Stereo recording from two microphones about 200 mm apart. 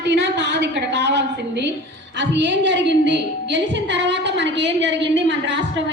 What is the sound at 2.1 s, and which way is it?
A woman's voice, 60° right (ahead or behind).